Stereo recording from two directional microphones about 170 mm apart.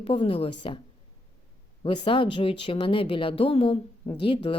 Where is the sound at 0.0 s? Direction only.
30° left (ahead or behind).